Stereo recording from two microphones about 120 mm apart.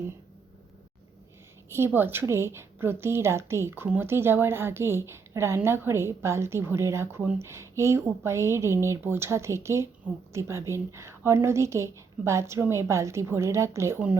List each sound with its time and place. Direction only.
1.7 s a woman's voice: 20° right (ahead or behind)